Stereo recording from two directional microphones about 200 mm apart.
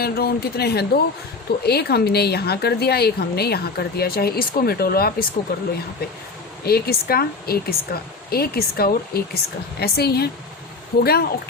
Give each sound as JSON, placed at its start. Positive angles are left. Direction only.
{"t": 0.0, "sound": "a woman's voice", "side_deg": 50}
{"t": 6.7, "sound": "a woman's voice", "side_deg": 50}